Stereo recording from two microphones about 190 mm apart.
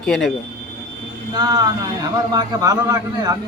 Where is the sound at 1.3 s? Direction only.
20° right (ahead or behind).